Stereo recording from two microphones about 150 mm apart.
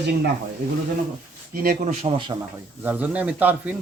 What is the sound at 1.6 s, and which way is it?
Speech, 75° right (ahead or behind).